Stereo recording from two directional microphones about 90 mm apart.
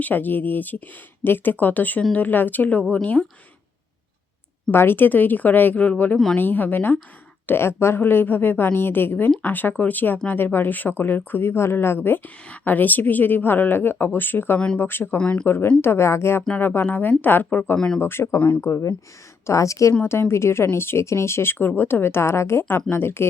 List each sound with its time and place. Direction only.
0.0 s speech: 20° left (ahead or behind)
4.7 s speech: 25° left (ahead or behind)
15.2 s speech: 10° left (ahead or behind)
15.4 s speech: 25° left (ahead or behind)
18.0 s a woman's voice: 25° left (ahead or behind)